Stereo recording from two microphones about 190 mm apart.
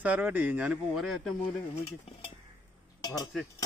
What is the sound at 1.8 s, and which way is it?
Stir, 30° left (ahead or behind).